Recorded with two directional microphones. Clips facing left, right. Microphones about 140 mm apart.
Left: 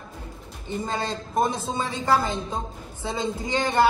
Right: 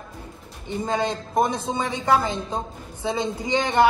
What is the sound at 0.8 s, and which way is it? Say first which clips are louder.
A man's voice: right 7 dB; 20° right (ahead or behind).